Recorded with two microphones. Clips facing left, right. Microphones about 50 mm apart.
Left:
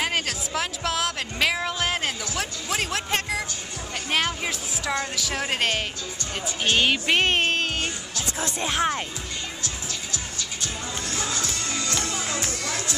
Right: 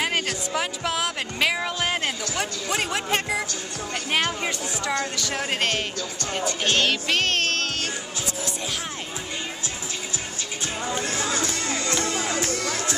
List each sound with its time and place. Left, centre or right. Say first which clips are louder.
0.0 s speech: right 1 dB; centre
6.6 s music: left 3 dB; centre
8.4 s speech: left 10 dB; left
10.6 s music: right 6 dB; right